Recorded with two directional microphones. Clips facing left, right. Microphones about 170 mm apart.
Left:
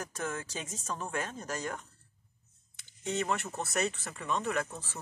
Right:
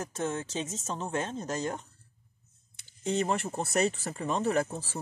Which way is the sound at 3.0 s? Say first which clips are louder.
Right 4 dB; 30° right (ahead or behind).